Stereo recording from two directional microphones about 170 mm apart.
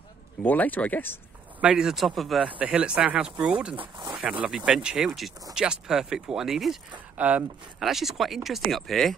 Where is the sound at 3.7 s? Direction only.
30° right (ahead or behind).